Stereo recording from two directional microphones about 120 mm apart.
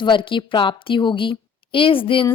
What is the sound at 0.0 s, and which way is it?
A woman's voice, 45° left (ahead or behind).